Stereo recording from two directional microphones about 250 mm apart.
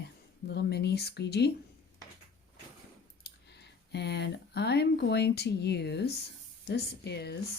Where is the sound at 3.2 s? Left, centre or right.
Left.